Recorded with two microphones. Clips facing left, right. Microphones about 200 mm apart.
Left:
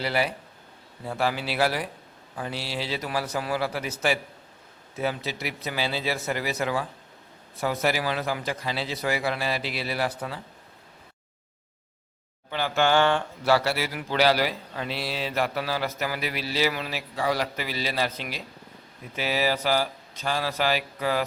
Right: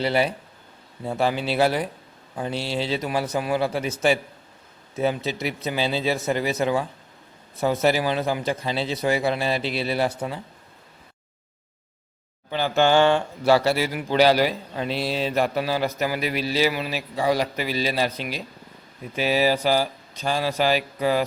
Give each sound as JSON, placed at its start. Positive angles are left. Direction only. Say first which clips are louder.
{"t": 0.0, "sound": "a man's voice", "louder": "right 4 dB", "side_deg": -25}
{"t": 12.5, "sound": "speech", "louder": "right 4 dB", "side_deg": -20}